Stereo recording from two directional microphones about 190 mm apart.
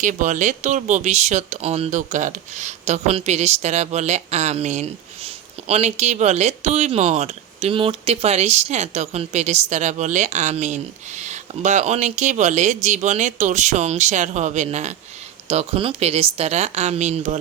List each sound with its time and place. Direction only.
0.0 s speech: 40° right (ahead or behind)